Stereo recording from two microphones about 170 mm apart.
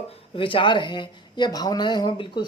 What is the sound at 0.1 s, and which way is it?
A woman's voice, 30° left (ahead or behind).